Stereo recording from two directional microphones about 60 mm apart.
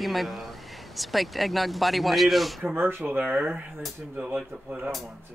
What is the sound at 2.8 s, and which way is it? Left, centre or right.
Speech, right.